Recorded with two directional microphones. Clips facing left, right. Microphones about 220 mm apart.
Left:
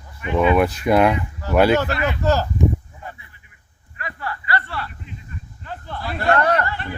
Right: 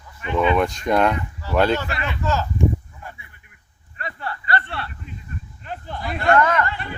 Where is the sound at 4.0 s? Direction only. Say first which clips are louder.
Left 1 dB; 30° right (ahead or behind).